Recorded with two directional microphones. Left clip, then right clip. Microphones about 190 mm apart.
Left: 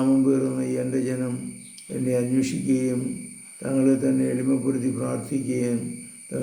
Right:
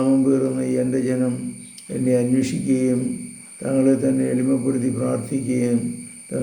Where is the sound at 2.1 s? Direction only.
5° right (ahead or behind).